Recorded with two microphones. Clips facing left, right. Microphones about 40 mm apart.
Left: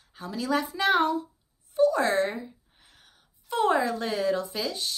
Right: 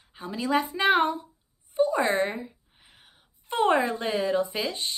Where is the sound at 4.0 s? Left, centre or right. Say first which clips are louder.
Right 1 dB; centre.